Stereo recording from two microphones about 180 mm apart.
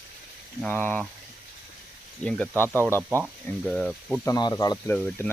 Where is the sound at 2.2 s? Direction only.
5° left (ahead or behind).